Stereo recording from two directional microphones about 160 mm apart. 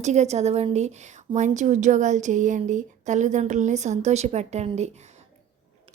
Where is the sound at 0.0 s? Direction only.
45° right (ahead or behind).